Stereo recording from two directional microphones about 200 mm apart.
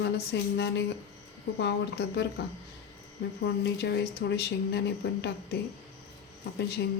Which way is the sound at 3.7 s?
55° left (ahead or behind).